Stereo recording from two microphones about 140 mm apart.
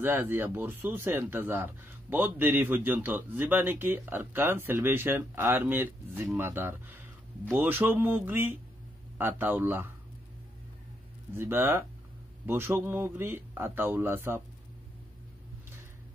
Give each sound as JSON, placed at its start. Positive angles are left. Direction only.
{"t": 0.0, "sound": "speech", "side_deg": -15}
{"t": 11.3, "sound": "speech", "side_deg": -15}